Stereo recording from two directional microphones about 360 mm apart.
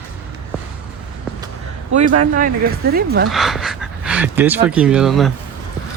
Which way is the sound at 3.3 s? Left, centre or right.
Centre.